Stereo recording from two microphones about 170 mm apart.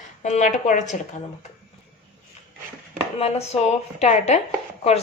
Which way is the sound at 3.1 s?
40° left (ahead or behind).